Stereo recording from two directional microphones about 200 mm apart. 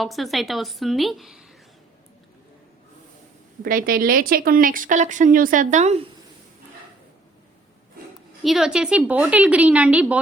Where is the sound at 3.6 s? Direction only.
45° right (ahead or behind).